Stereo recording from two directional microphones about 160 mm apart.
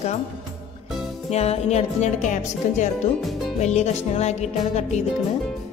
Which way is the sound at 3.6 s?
45° left (ahead or behind).